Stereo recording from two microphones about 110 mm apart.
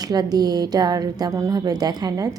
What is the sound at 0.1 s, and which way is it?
A woman's voice, 35° right (ahead or behind).